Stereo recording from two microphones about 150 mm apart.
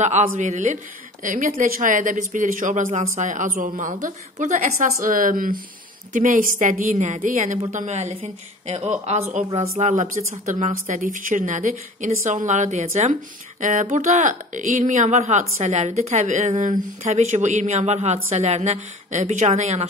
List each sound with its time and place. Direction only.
0.0 s a woman's voice: 50° right (ahead or behind)
5.0 s a woman's voice: 65° right (ahead or behind); by 19.9 s 45° right (ahead or behind)